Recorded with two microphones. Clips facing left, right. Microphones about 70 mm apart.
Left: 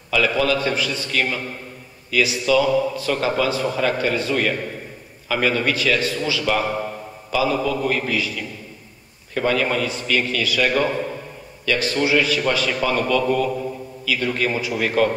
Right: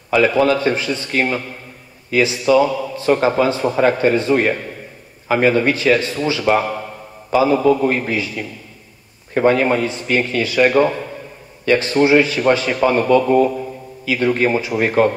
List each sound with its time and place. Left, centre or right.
0.1 s a man's voice: right